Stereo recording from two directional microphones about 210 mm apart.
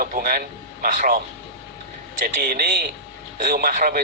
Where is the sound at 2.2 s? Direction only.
45° right (ahead or behind).